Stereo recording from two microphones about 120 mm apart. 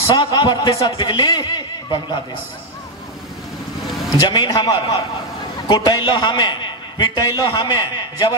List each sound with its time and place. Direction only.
0.1 s a man's voice: 40° left (ahead or behind)
4.3 s a man's voice: 35° left (ahead or behind)